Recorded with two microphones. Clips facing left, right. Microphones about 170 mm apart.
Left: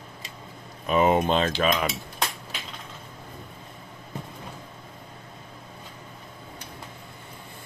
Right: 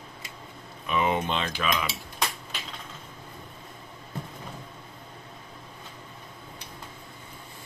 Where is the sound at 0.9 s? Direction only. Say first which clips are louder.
Left 6 dB; 40° left (ahead or behind).